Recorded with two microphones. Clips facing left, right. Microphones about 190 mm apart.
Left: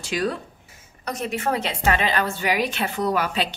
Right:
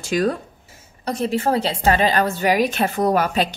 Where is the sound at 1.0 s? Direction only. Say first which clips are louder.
Right 5 dB; 30° right (ahead or behind).